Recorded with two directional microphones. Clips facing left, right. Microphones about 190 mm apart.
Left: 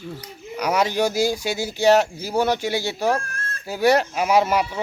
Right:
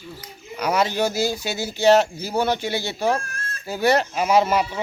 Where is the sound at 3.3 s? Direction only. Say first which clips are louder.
Left 1 dB; 55° left (ahead or behind).